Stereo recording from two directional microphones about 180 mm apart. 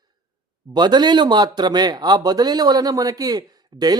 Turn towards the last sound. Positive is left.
turn(degrees=-20)  # may be behind; listen again after turning